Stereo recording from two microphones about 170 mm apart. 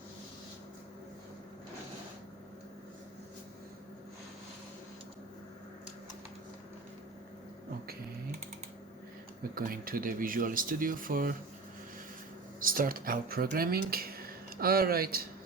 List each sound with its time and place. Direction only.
9.4 s speech: 60° right (ahead or behind)
12.5 s speech: 55° right (ahead or behind)